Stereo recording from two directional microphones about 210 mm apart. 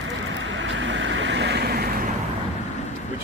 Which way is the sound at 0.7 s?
60° right (ahead or behind).